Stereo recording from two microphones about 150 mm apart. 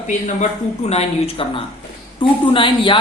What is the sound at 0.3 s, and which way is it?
Speech, 50° left (ahead or behind).